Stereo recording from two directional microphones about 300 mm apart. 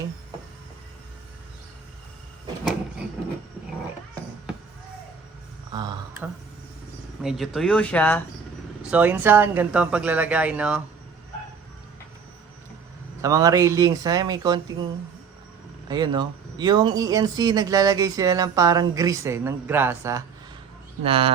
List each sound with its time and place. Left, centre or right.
5.7 s a sound: centre
7.2 s speech: centre
8.8 s speech: centre
13.2 s speech: centre
15.9 s speech: centre